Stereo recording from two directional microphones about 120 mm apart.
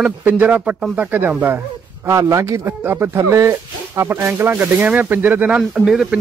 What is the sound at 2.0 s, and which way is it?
Speech, 25° right (ahead or behind).